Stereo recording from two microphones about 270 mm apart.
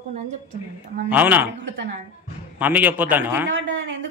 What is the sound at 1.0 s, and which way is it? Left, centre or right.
Speech, centre.